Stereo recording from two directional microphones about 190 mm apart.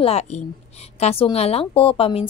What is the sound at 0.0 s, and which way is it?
A woman's voice, 35° left (ahead or behind).